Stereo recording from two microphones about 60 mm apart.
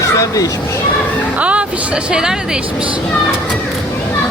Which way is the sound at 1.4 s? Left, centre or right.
Right.